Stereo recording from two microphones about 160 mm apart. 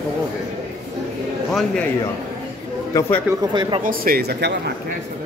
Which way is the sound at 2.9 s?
20° left (ahead or behind).